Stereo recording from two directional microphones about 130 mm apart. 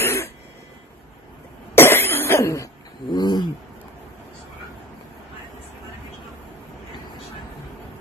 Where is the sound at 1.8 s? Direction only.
20° left (ahead or behind).